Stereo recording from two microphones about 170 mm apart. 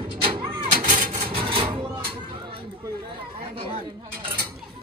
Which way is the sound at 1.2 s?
30° right (ahead or behind).